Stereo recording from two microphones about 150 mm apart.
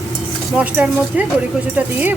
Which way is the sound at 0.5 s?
10° right (ahead or behind).